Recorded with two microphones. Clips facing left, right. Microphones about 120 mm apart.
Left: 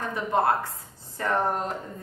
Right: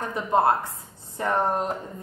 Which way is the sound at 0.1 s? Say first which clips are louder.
Right 3 dB; 20° right (ahead or behind).